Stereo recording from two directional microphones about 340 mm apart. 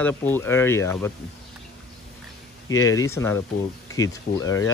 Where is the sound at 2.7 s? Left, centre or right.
Centre.